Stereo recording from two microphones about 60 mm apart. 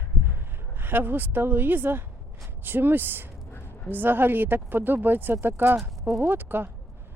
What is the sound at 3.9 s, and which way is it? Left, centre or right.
Speech, right.